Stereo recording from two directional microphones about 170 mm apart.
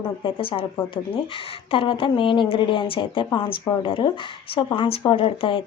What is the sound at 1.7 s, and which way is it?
Speech, 30° left (ahead or behind).